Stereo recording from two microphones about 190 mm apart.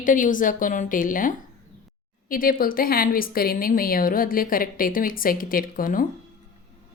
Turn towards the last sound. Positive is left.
turn(degrees=45)  # may be behind; listen again after turning